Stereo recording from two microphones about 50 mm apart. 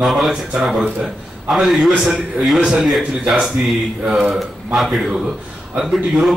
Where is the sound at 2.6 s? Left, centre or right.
Centre.